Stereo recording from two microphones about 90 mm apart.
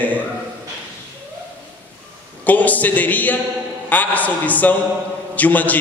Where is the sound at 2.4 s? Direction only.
20° left (ahead or behind).